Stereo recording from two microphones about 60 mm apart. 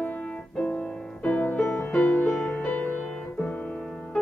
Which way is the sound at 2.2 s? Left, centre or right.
Centre.